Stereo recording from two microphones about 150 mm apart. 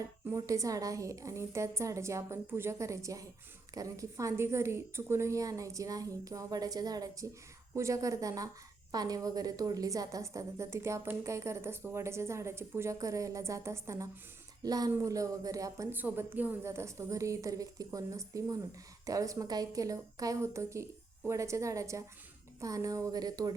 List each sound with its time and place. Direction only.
0.3 s a woman's voice: 20° right (ahead or behind)